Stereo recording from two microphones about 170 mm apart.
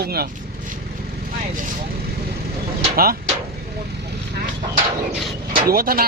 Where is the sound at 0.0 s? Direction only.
65° right (ahead or behind).